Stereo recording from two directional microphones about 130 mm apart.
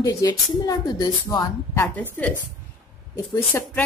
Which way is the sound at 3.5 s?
15° left (ahead or behind).